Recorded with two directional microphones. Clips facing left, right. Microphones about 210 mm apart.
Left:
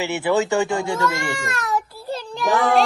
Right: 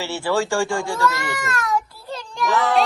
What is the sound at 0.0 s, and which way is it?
Speech, 20° left (ahead or behind).